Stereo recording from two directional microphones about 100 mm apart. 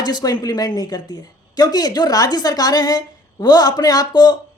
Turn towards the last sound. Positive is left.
turn(degrees=40)  # may be behind; listen again after turning